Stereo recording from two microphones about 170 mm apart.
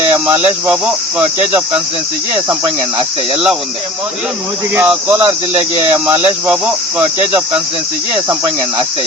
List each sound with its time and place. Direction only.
0.0 s cricket: 25° right (ahead or behind)
4.7 s speech: 10° right (ahead or behind)
5.5 s speech: 30° right (ahead or behind)